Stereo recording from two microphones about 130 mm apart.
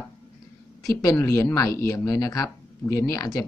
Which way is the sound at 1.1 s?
20° left (ahead or behind).